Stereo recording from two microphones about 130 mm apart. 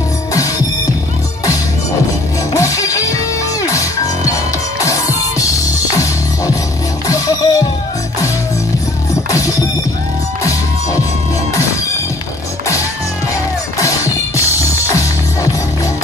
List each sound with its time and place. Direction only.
2.5 s music: 25° left (ahead or behind)
7.1 s music: 25° left (ahead or behind)
9.1 s music: 25° left (ahead or behind)
13.7 s music: 25° left (ahead or behind)